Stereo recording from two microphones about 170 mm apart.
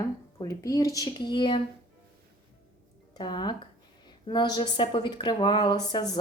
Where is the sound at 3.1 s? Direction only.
25° left (ahead or behind).